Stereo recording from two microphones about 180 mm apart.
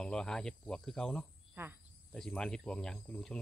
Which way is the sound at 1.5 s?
10° right (ahead or behind).